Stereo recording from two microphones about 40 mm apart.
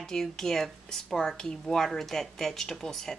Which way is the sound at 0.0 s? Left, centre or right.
Centre.